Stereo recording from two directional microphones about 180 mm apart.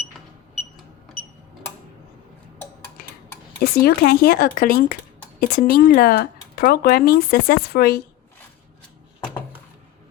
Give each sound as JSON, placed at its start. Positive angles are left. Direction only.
{"t": 3.0, "sound": "tick-tock", "side_deg": 60}
{"t": 3.6, "sound": "speech", "side_deg": 55}